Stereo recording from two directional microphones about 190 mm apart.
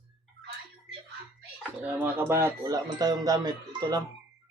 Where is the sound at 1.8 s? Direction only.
10° right (ahead or behind).